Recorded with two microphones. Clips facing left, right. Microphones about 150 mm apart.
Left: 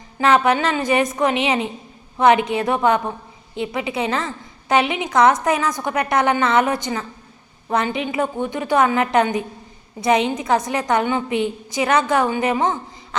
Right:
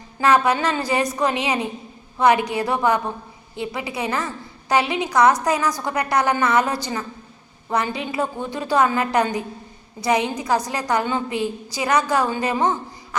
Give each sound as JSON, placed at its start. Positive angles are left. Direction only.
{"t": 0.2, "sound": "a woman's voice", "side_deg": 25}